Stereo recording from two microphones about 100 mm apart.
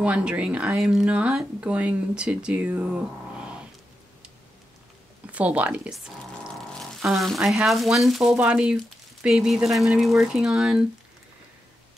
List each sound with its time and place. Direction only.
0.0 s speech: 10° right (ahead or behind)
5.2 s speech: 15° right (ahead or behind)
7.1 s speech: centre (ahead or behind)